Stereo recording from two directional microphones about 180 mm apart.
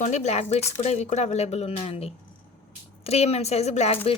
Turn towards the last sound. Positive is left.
turn(degrees=35)  # may be behind; listen again after turning